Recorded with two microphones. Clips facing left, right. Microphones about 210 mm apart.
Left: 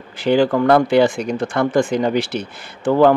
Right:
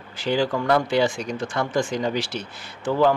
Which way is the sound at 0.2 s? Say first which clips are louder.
Left 8 dB; 60° left (ahead or behind).